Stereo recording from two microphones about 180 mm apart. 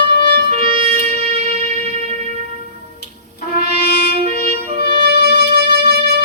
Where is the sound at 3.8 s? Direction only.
60° left (ahead or behind).